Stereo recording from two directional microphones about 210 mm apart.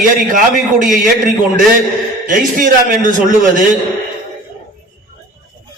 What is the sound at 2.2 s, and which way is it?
Speech, 40° right (ahead or behind).